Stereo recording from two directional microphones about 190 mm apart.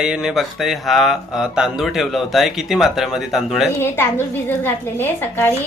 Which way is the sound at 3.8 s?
10° left (ahead or behind).